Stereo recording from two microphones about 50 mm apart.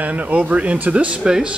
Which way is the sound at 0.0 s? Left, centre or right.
Right.